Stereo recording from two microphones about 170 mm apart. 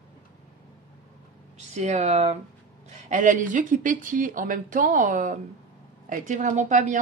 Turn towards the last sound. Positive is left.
turn(degrees=-45)  # may be behind; listen again after turning